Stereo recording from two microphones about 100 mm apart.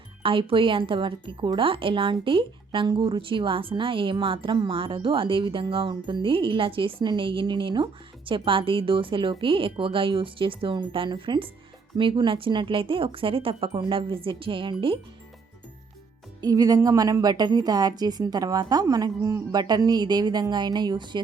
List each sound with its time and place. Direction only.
0.2 s speech: 65° right (ahead or behind)
16.4 s a woman's voice: 40° right (ahead or behind)